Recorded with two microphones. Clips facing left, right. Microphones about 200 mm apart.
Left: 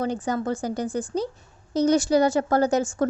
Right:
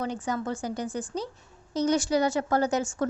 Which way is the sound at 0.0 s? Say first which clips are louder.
Left 5 dB; 35° left (ahead or behind).